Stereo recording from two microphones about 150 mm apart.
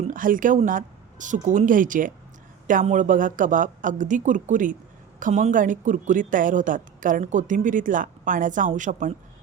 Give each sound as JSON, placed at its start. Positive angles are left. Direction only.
{"t": 0.0, "sound": "speech", "side_deg": -65}